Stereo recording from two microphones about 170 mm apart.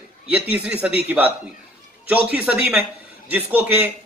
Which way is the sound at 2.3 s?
10° right (ahead or behind).